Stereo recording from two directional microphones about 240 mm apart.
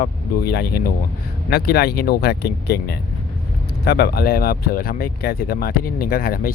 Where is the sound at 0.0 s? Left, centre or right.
Left.